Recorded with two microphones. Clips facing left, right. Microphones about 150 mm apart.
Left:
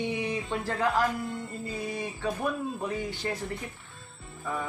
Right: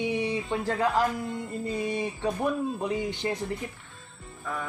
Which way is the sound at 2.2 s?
20° right (ahead or behind).